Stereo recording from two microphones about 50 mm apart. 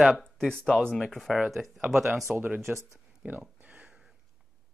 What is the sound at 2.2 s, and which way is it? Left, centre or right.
Speech, right.